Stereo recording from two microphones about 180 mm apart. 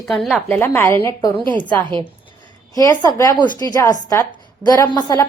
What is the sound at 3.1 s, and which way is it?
Speech, 15° left (ahead or behind).